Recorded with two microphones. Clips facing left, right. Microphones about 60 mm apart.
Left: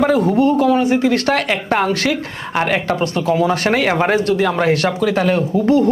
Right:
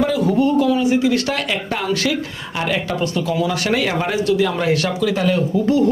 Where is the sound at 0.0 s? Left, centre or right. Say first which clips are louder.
Left 3 dB; left.